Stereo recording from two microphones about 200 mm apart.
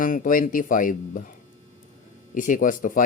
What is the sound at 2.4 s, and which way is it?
Speech, 40° left (ahead or behind).